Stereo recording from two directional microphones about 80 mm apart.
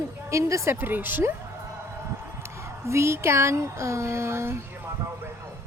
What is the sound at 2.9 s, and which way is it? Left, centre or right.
Speech, right.